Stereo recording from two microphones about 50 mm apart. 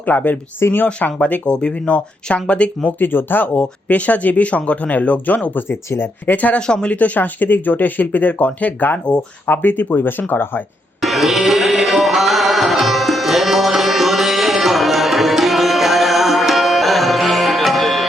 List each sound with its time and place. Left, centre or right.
0.0 s speech: left
0.6 s speech: left
1.0 s speech: left
3.0 s speech: left
5.5 s speech: left
6.2 s speech: left
6.6 s speech: centre
6.9 s speech: left
11.0 s music: centre